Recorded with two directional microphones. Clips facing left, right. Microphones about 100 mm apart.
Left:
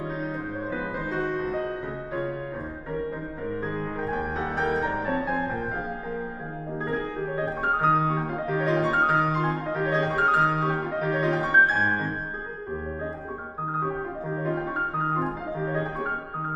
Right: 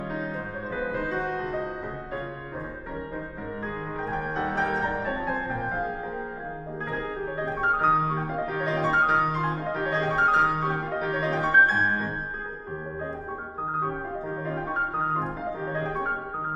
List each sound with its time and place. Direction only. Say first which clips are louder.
0.7 s music: right 3 dB; centre (ahead or behind)
4.6 s music: left 3 dB; centre (ahead or behind)
7.2 s music: right 1 dB; centre (ahead or behind)